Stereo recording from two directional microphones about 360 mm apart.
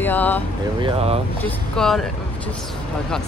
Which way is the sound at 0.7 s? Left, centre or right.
Centre.